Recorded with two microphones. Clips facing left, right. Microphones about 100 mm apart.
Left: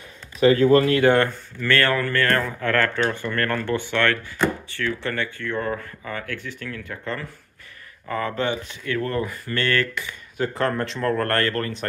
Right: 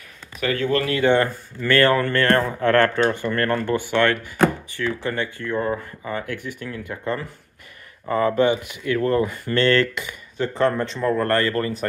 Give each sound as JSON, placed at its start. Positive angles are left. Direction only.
{"t": 0.4, "sound": "speech", "side_deg": 30}
{"t": 1.6, "sound": "speech", "side_deg": -20}
{"t": 3.2, "sound": "speech", "side_deg": -20}
{"t": 10.3, "sound": "a man's voice", "side_deg": 5}